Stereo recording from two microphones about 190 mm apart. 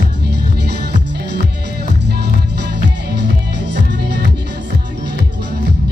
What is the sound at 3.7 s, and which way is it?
Music, 65° right (ahead or behind).